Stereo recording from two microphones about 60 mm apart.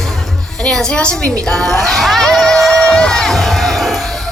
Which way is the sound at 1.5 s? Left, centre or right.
Centre.